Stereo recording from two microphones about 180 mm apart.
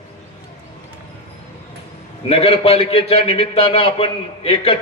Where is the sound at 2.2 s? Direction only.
35° left (ahead or behind).